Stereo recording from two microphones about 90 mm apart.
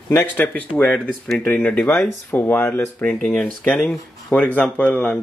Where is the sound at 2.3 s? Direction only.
20° left (ahead or behind).